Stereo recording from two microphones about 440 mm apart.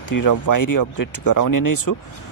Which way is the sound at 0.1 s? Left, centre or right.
Left.